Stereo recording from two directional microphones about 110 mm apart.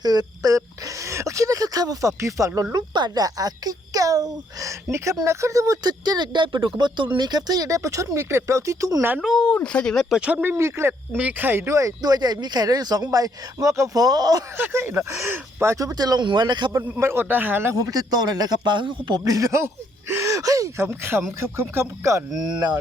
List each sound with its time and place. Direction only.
0.0 s speech: 35° right (ahead or behind)
2.7 s speech: 40° right (ahead or behind)
9.2 s speech: centre (ahead or behind)
9.5 s speech: 15° left (ahead or behind)
10.2 s speech: 10° right (ahead or behind); by 14.4 s 35° right (ahead or behind)
14.6 s speech: 20° right (ahead or behind); by 16.7 s 40° right (ahead or behind)
17.0 s speech: 20° right (ahead or behind); by 19.2 s 45° right (ahead or behind)
19.2 s speech: 30° right (ahead or behind)
20.8 s speech: 20° right (ahead or behind)